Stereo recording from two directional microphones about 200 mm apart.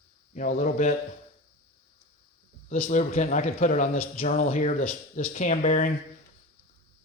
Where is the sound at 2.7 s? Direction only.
35° left (ahead or behind).